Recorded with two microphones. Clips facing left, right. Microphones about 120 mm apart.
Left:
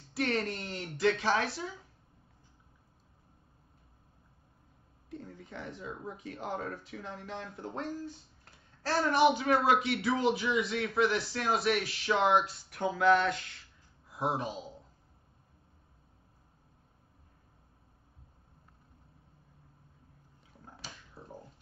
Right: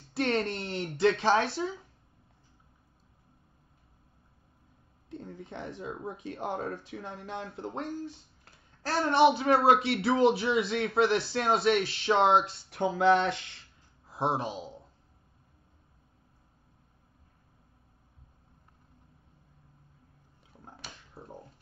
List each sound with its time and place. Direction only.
0.1 s a man's voice: 30° right (ahead or behind)
5.1 s a man's voice: 25° right (ahead or behind)
9.0 s a man's voice: 30° right (ahead or behind)
21.1 s typewriter: 25° right (ahead or behind)